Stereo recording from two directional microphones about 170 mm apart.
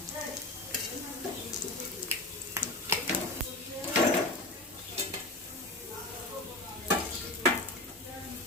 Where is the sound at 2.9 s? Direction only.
15° right (ahead or behind).